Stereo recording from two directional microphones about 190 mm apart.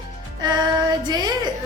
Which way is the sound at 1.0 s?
20° right (ahead or behind).